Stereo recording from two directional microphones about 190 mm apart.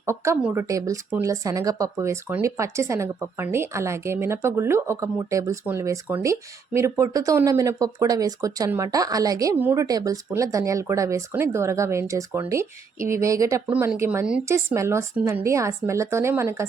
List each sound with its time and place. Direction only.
0.0 s speech: 15° right (ahead or behind)